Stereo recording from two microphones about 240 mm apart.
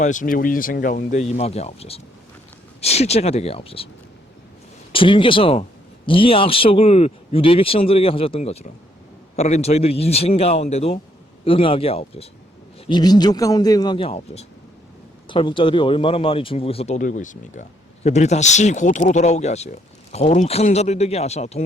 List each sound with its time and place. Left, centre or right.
0.0 s speech: left
4.9 s a man's voice: left